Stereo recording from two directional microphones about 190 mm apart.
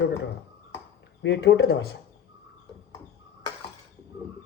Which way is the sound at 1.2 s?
70° left (ahead or behind).